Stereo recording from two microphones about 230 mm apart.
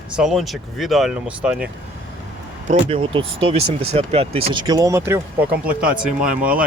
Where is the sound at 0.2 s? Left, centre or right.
Centre.